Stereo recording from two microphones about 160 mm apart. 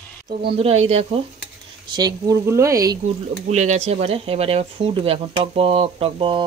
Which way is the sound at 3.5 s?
45° right (ahead or behind).